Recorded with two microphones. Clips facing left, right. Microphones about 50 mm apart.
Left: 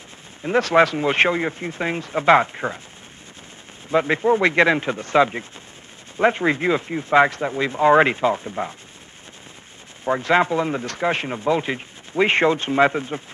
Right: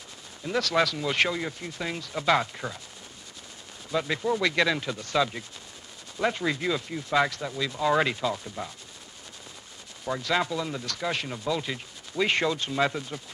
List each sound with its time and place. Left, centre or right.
0.4 s speech: left
3.9 s speech: left
10.0 s speech: left